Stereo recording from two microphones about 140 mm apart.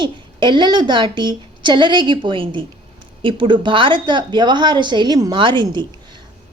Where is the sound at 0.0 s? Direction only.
35° right (ahead or behind).